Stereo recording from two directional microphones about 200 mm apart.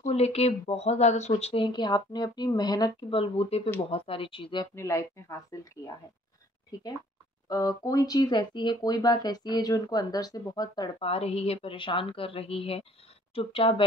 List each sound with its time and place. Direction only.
0.0 s speech: 30° left (ahead or behind); by 5.7 s 15° left (ahead or behind)
7.4 s speech: 20° left (ahead or behind)